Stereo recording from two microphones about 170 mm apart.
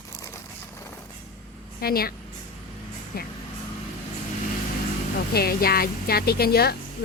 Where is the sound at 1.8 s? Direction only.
65° left (ahead or behind).